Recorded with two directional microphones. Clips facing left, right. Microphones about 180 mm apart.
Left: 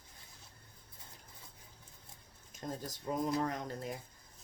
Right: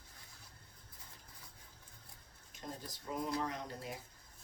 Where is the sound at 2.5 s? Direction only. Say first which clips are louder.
Left 5 dB; 45° left (ahead or behind).